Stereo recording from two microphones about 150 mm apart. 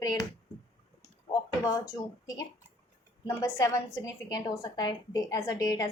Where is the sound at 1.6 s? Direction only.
20° left (ahead or behind).